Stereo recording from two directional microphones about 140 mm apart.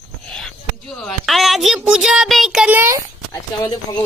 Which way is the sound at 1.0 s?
Centre (ahead or behind).